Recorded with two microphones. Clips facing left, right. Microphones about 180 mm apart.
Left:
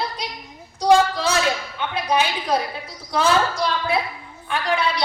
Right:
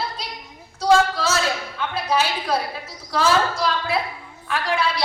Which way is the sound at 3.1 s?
25° left (ahead or behind).